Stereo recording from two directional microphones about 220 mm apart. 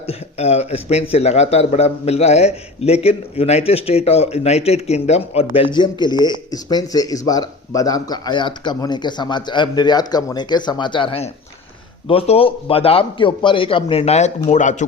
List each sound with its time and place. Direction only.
0.1 s speech: 30° left (ahead or behind)